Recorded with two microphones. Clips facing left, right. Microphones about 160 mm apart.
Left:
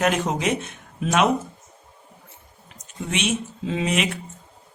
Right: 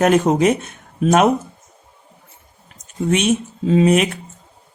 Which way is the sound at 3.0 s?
45° right (ahead or behind).